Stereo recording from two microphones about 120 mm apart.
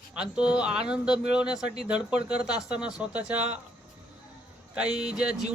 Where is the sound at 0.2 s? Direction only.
10° right (ahead or behind).